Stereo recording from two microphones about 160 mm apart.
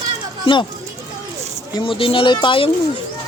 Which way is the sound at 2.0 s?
35° left (ahead or behind).